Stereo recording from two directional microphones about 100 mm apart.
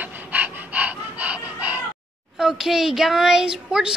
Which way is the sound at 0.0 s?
15° right (ahead or behind).